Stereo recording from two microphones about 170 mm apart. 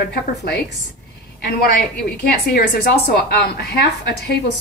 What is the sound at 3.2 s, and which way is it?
A woman's voice, 70° left (ahead or behind).